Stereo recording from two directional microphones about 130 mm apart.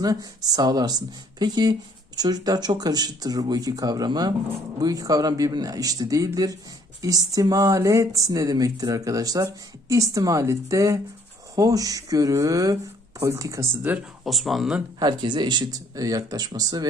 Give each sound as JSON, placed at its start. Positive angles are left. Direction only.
{"t": 0.0, "sound": "speech", "side_deg": -30}
{"t": 13.9, "sound": "speech", "side_deg": -10}
{"t": 14.3, "sound": "speech", "side_deg": 0}
{"t": 14.9, "sound": "speech", "side_deg": -35}